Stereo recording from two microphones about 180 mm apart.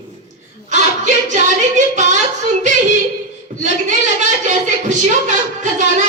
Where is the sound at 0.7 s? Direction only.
45° right (ahead or behind).